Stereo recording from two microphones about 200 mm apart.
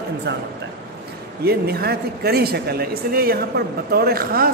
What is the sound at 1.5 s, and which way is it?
A man's voice, 50° right (ahead or behind).